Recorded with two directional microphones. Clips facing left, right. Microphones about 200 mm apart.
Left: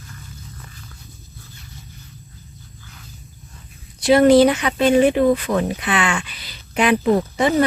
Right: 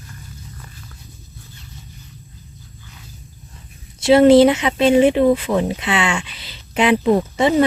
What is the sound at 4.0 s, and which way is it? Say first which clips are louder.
Speech: right 2 dB; 25° right (ahead or behind).